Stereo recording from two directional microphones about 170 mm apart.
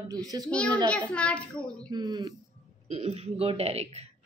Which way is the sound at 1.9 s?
20° right (ahead or behind).